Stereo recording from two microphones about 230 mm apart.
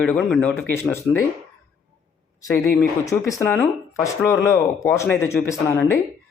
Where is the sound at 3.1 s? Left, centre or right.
Centre.